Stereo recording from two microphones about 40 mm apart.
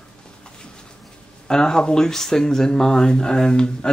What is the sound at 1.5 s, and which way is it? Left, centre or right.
Speech, centre.